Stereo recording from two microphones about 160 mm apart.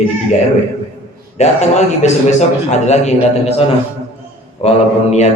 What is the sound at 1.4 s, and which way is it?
A man's voice, 45° left (ahead or behind).